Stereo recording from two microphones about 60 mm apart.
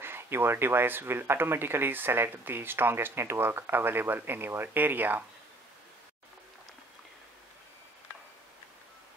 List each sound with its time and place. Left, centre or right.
0.0 s speech: right